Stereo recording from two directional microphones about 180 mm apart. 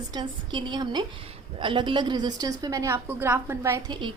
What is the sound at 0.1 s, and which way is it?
A woman's voice, 25° right (ahead or behind).